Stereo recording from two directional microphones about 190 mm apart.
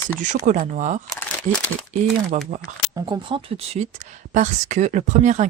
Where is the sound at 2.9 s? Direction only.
20° right (ahead or behind).